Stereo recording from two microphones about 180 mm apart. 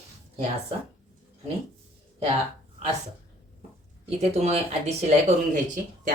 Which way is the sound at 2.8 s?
35° right (ahead or behind).